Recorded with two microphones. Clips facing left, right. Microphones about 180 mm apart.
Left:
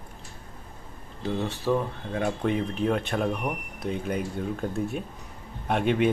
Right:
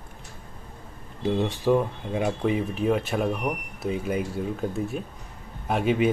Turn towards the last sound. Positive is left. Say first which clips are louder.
# right 1 dB
turn(degrees=-5)  # may be behind; listen again after turning